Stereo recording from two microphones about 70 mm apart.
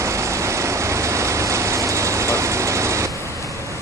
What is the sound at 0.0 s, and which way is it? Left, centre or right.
Vehicle, right.